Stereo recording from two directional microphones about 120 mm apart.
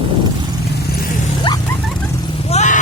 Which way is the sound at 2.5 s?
70° left (ahead or behind).